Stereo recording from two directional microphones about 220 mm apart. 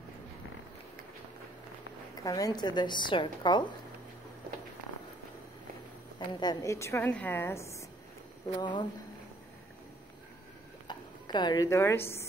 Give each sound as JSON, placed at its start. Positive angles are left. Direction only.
{"t": 2.2, "sound": "a woman's voice", "side_deg": 15}
{"t": 6.1, "sound": "a woman's voice", "side_deg": 20}
{"t": 10.9, "sound": "speech", "side_deg": 20}